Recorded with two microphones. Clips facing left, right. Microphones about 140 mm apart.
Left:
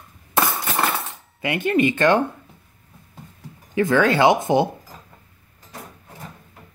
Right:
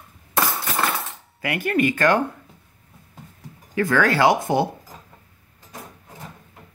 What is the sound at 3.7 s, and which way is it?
Speech, 20° left (ahead or behind).